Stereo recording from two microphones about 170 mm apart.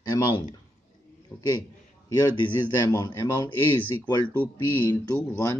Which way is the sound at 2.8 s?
20° left (ahead or behind).